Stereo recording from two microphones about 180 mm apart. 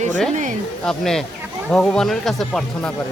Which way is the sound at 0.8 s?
5° left (ahead or behind).